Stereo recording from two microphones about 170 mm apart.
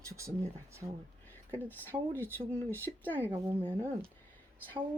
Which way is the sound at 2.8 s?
10° left (ahead or behind).